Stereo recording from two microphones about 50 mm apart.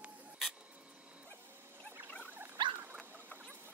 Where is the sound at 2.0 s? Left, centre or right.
Left.